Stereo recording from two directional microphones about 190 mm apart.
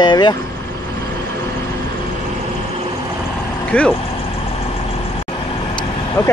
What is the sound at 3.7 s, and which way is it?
Speech, 10° left (ahead or behind).